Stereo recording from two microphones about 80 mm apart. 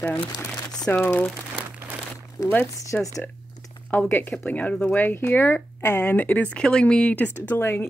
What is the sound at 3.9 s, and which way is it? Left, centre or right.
Speech, left.